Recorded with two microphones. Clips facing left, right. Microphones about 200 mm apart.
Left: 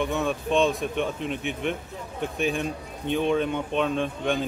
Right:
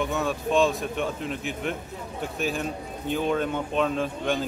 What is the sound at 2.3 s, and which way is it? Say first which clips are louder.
Speech: left 2 dB; 5° right (ahead or behind).